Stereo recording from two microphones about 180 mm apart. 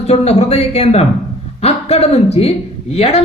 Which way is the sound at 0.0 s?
35° left (ahead or behind).